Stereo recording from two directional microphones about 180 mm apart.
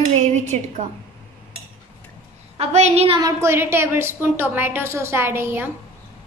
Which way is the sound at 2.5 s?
35° right (ahead or behind).